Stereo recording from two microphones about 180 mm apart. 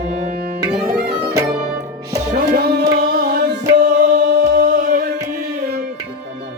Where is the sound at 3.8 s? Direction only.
65° right (ahead or behind).